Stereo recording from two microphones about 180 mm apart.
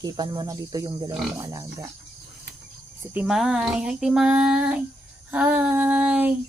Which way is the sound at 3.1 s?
Centre (ahead or behind).